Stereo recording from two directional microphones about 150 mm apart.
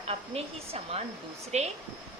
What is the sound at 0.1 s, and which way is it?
A woman's voice, 40° right (ahead or behind).